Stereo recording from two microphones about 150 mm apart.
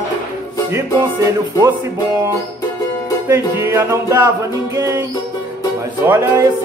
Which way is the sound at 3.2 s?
15° right (ahead or behind).